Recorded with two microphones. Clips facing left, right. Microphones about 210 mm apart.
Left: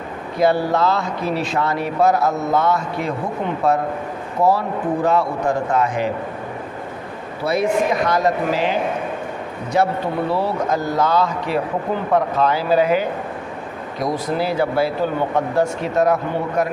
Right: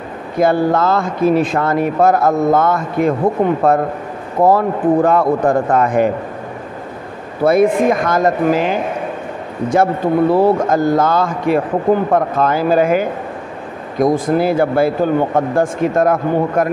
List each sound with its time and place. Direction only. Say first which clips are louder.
0.4 s speech: right 3 dB; 50° right (ahead or behind)
7.4 s speech: right 7 dB; 55° right (ahead or behind)
9.7 s speech: right 5 dB; 50° right (ahead or behind)